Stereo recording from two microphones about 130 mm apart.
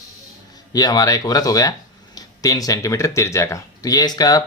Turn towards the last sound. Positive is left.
turn(degrees=30)  # may be behind; listen again after turning